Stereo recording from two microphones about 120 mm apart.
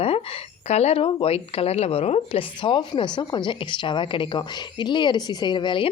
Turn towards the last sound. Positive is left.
turn(degrees=40)  # may be behind; listen again after turning